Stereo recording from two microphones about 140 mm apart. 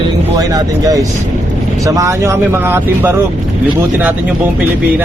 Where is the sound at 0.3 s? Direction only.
25° right (ahead or behind).